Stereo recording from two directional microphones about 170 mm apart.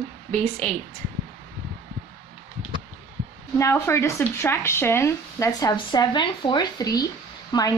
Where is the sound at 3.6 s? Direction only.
15° left (ahead or behind).